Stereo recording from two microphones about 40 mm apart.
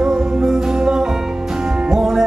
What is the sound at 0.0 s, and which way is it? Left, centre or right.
Music, right.